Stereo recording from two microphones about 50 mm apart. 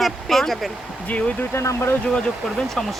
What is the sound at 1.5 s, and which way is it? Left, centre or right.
Speech, left.